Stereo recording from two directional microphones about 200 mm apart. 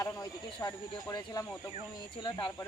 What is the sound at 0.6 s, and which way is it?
Speech, 20° left (ahead or behind).